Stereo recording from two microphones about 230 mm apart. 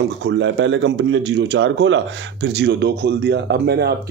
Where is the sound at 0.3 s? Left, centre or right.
Right.